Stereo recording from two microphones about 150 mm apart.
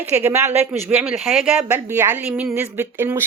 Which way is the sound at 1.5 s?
15° right (ahead or behind).